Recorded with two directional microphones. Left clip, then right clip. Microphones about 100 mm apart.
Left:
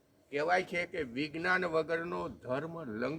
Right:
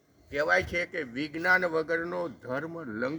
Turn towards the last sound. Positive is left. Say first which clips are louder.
# right 4 dB
turn(degrees=0)  # may be behind; listen again after turning